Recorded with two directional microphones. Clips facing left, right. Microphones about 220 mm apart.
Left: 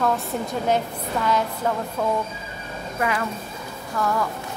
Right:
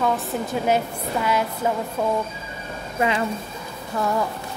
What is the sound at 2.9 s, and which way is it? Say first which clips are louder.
Speech: right 3 dB; 20° right (ahead or behind).